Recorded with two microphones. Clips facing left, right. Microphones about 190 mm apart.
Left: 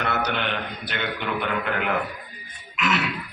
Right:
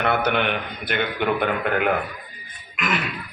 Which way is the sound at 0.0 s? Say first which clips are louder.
Right 5 dB; 55° right (ahead or behind).